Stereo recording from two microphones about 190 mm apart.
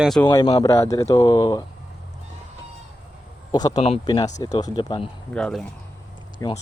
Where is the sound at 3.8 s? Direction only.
30° left (ahead or behind).